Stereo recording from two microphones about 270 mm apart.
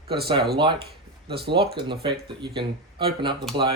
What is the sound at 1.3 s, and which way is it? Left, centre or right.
Speech, right.